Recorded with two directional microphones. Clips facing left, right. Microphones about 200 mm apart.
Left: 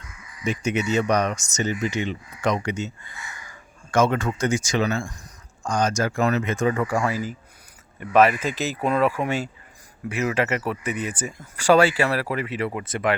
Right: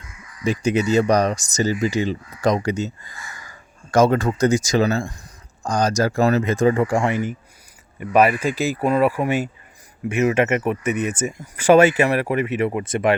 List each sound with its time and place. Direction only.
0.4 s speech: 35° right (ahead or behind)
7.9 s speech: 15° right (ahead or behind)